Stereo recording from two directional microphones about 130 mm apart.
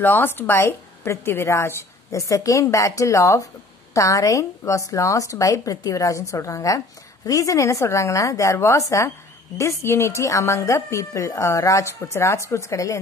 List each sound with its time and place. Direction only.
0.0 s a woman's voice: 15° left (ahead or behind)